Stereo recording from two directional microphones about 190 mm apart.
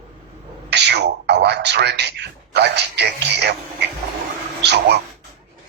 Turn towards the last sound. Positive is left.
turn(degrees=-65)  # may be behind; listen again after turning